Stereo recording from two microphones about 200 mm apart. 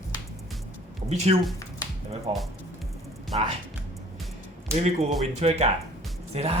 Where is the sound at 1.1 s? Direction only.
35° right (ahead or behind).